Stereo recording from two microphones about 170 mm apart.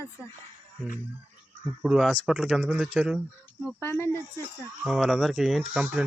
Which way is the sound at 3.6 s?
15° left (ahead or behind).